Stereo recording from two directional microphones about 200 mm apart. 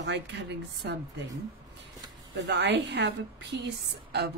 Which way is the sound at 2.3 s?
60° right (ahead or behind).